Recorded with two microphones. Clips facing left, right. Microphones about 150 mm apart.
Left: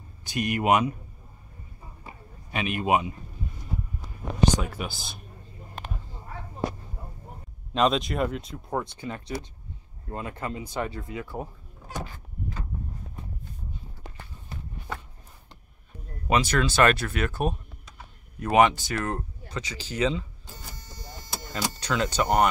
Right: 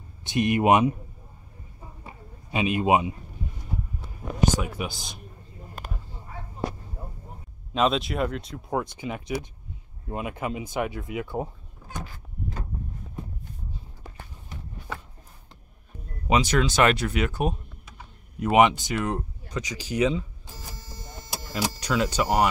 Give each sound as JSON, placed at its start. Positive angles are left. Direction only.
{"t": 0.2, "sound": "speech", "side_deg": -25}
{"t": 2.5, "sound": "speech", "side_deg": -20}
{"t": 4.6, "sound": "speech", "side_deg": -15}
{"t": 7.7, "sound": "speech", "side_deg": 0}
{"t": 8.9, "sound": "speech", "side_deg": -15}
{"t": 16.3, "sound": "speech", "side_deg": -15}
{"t": 21.3, "sound": "speech", "side_deg": -10}